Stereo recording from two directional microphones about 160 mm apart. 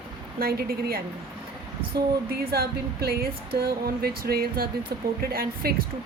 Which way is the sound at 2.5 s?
70° right (ahead or behind).